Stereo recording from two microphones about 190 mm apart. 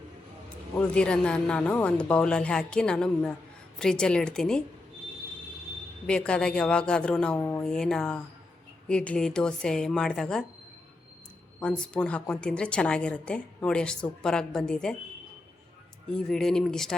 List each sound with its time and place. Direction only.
0.8 s a woman's voice: 5° left (ahead or behind)
6.1 s a woman's voice: 5° left (ahead or behind)
11.6 s a woman's voice: 5° left (ahead or behind)
16.0 s a woman's voice: 5° left (ahead or behind)